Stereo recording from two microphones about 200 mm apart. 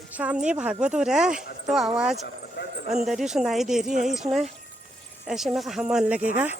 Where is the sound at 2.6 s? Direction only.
60° left (ahead or behind).